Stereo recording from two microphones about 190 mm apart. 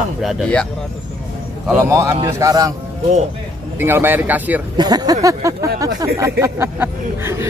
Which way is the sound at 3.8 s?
10° right (ahead or behind).